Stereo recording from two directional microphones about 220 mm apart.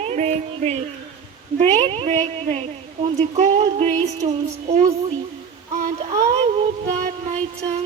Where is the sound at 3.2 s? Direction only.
30° right (ahead or behind).